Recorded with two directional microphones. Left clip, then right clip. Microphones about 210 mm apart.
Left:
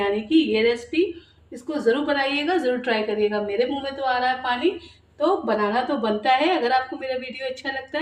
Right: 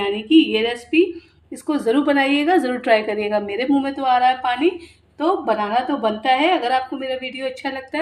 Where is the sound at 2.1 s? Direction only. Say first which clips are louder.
Right 5 dB; 35° right (ahead or behind).